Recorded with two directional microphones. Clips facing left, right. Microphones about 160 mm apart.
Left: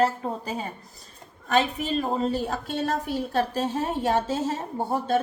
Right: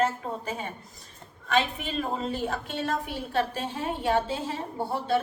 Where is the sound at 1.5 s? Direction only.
40° left (ahead or behind).